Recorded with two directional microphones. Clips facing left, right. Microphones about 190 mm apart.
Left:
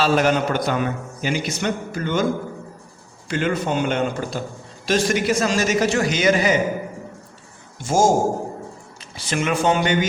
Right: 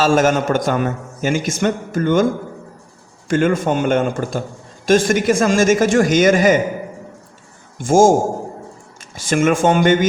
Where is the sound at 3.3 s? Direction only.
50° right (ahead or behind).